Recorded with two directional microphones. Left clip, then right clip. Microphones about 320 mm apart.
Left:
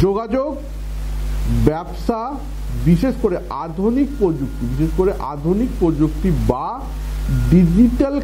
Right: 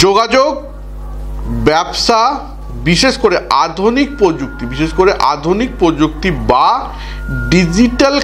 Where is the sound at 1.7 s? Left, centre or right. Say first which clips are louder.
Right 10 dB; centre.